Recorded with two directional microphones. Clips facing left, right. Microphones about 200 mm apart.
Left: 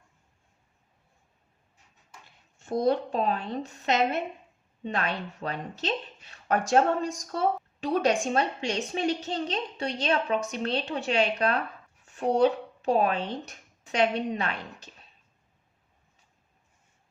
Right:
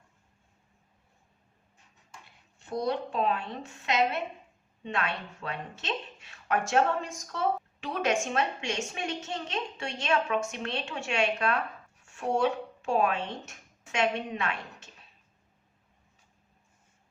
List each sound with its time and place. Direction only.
2.8 s a woman's voice: 40° left (ahead or behind)